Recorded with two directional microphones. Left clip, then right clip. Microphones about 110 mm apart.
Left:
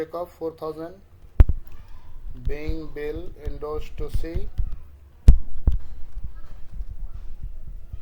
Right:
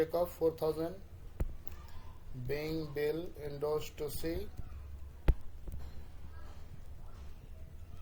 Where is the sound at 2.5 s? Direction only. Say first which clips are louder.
Left 4 dB; 20° left (ahead or behind).